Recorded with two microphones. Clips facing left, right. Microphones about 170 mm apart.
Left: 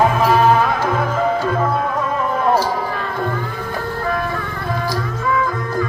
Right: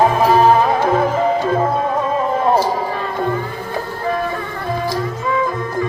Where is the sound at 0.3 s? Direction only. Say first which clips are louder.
Right 2 dB; 30° right (ahead or behind).